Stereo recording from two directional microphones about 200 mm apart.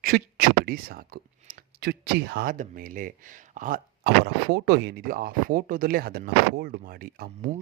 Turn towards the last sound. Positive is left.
turn(degrees=-45)  # may be behind; listen again after turning